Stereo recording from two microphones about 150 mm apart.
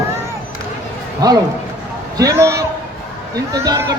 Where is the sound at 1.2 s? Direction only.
25° right (ahead or behind).